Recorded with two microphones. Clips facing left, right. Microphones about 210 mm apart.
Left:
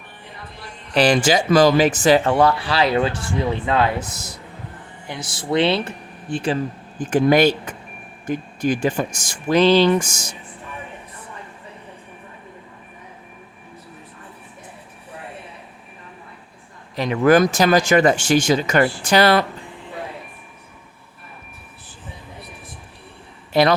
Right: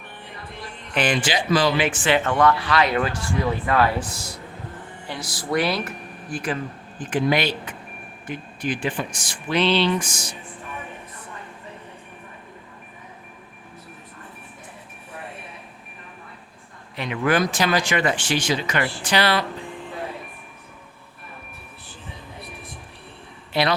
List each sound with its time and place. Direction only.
0.9 s speech: 40° left (ahead or behind)
7.0 s speech: 45° left (ahead or behind)
16.9 s speech: 40° left (ahead or behind)
23.5 s speech: 45° left (ahead or behind)